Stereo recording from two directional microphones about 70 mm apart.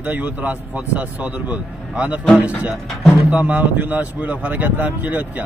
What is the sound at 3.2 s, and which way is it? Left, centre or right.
Speech, right.